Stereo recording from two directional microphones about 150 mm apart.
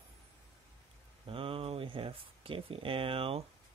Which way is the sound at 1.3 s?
40° right (ahead or behind).